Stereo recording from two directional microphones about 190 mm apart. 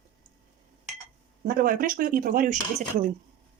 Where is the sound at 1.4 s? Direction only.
45° right (ahead or behind).